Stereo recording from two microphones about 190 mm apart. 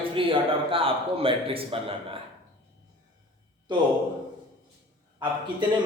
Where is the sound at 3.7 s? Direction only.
25° right (ahead or behind).